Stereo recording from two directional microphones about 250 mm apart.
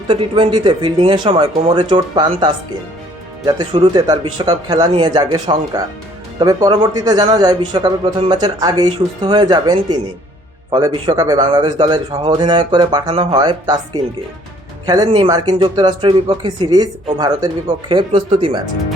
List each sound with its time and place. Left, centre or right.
0.1 s speech: right